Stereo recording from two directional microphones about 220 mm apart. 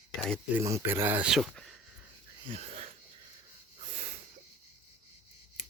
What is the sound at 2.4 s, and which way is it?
Speech, 25° right (ahead or behind).